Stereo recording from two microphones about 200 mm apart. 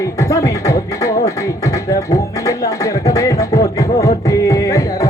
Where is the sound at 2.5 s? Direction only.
15° left (ahead or behind).